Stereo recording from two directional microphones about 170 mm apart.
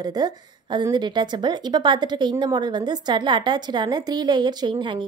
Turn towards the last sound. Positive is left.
turn(degrees=-30)  # may be behind; listen again after turning